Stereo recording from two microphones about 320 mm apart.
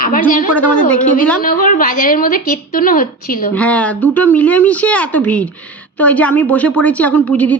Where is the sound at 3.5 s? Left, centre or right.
Centre.